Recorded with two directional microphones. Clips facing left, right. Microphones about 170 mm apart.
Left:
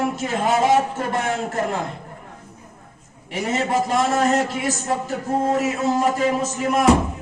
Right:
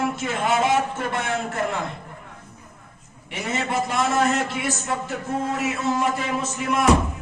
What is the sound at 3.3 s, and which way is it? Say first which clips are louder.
A man's voice: left 4 dB; 40° left (ahead or behind).